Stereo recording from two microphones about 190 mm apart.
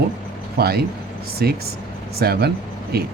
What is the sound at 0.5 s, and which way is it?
Speech, 55° right (ahead or behind).